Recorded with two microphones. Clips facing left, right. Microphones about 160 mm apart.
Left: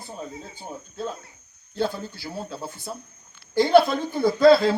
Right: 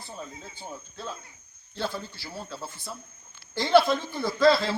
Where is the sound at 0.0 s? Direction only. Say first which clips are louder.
Left 4 dB; 45° left (ahead or behind).